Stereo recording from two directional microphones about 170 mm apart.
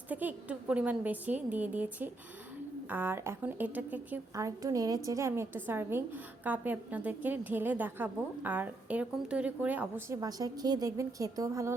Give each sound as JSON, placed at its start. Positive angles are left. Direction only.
{"t": 0.1, "sound": "a woman's voice", "side_deg": -10}
{"t": 10.2, "sound": "a woman's voice", "side_deg": -20}